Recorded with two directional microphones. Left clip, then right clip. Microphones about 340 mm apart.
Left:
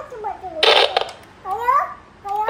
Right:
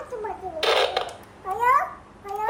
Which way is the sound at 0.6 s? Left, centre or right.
Left.